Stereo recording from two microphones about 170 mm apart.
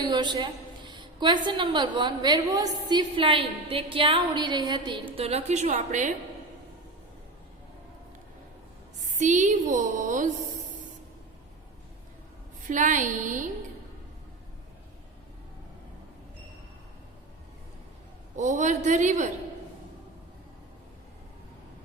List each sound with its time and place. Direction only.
0.0 s a woman's voice: 25° right (ahead or behind)
5.1 s a woman's voice: 35° right (ahead or behind)
9.0 s a woman's voice: 45° right (ahead or behind)
12.6 s a woman's voice: 50° right (ahead or behind)
18.3 s a woman's voice: 45° right (ahead or behind)